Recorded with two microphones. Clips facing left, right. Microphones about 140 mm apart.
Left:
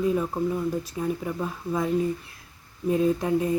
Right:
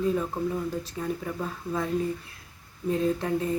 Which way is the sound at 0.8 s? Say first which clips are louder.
Left 3 dB; 10° left (ahead or behind).